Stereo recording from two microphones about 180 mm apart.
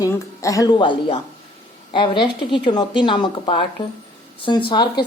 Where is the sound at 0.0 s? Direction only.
20° left (ahead or behind).